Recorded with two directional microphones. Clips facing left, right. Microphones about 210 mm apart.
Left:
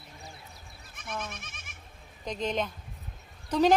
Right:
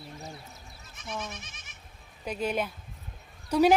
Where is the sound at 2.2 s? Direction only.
10° right (ahead or behind).